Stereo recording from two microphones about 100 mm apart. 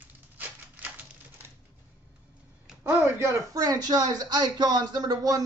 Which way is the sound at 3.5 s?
40° right (ahead or behind).